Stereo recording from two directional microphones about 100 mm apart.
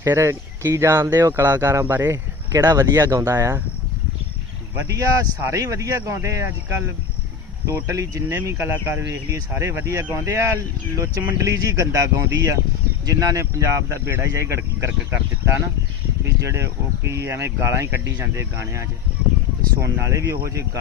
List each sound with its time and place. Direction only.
0.0 s speech: 30° right (ahead or behind)
2.5 s speech: 30° right (ahead or behind)
4.8 s speech: 35° right (ahead or behind)
16.4 s speech: 30° right (ahead or behind)